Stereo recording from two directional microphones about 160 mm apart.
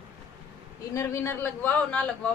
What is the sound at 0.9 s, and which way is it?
A woman's voice, 15° left (ahead or behind).